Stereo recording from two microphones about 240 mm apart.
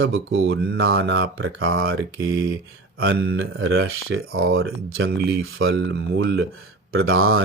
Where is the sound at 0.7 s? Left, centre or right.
Right.